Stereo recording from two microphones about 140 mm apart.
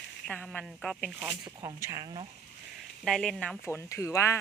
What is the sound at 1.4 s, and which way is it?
Speech, 25° right (ahead or behind).